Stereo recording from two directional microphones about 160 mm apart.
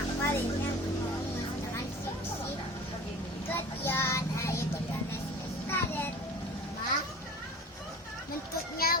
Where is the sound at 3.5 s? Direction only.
15° left (ahead or behind).